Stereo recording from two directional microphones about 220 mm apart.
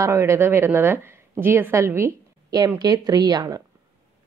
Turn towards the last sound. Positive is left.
turn(degrees=-15)  # may be behind; listen again after turning